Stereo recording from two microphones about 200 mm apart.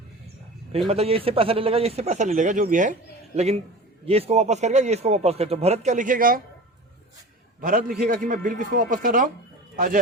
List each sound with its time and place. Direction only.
0.9 s speech: 30° right (ahead or behind)
7.6 s speech: 45° right (ahead or behind)